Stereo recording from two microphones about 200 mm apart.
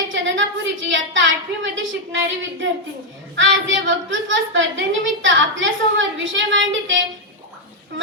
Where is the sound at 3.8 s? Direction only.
70° right (ahead or behind).